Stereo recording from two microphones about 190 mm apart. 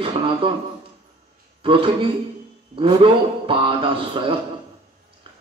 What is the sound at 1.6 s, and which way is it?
A man's voice, 30° right (ahead or behind).